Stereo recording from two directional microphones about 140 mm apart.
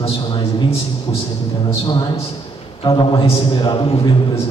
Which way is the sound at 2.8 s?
35° left (ahead or behind).